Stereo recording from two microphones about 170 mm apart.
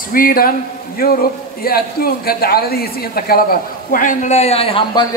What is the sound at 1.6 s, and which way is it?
A man's voice, 60° left (ahead or behind).